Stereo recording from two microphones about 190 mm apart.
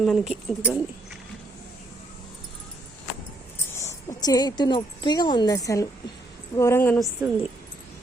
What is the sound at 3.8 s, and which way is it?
Speech, 15° left (ahead or behind).